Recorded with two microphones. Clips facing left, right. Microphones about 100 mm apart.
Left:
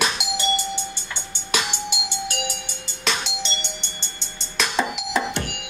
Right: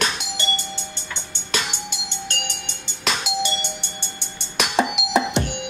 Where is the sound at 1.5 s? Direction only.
10° left (ahead or behind).